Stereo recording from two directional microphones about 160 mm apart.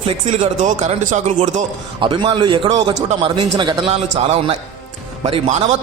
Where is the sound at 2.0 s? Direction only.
30° right (ahead or behind).